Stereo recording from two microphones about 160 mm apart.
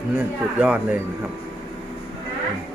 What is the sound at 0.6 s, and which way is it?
Speech, 5° right (ahead or behind).